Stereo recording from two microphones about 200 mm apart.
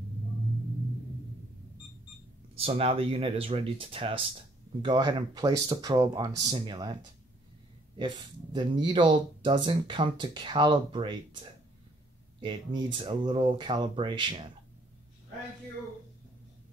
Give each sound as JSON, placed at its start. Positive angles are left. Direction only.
{"t": 2.5, "sound": "speech", "side_deg": -30}
{"t": 8.0, "sound": "speech", "side_deg": -20}
{"t": 12.4, "sound": "speech", "side_deg": -25}